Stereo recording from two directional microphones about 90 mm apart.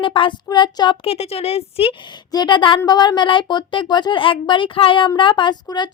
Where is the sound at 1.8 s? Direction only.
90° left.